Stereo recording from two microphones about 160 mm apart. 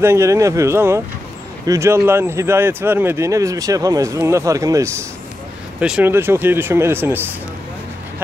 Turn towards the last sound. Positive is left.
turn(degrees=-15)  # may be behind; listen again after turning